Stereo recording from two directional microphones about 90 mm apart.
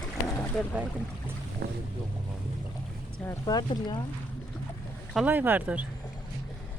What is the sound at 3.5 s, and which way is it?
Speech, 50° left (ahead or behind).